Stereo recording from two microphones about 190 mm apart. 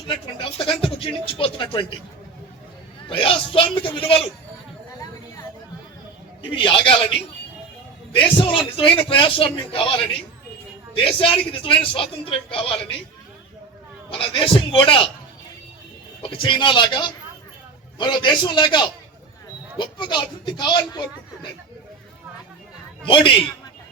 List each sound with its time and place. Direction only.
0.1 s speech: 30° left (ahead or behind)
3.1 s speech: 30° left (ahead or behind)
6.6 s speech: 30° left (ahead or behind)
8.4 s speech: 25° left (ahead or behind)
11.2 s speech: 30° left (ahead or behind)
14.1 s speech: 30° left (ahead or behind)
16.2 s speech: 25° left (ahead or behind)
23.0 s speech: 25° left (ahead or behind)